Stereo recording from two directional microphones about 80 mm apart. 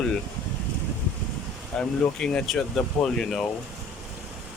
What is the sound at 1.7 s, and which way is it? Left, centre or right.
Speech, centre.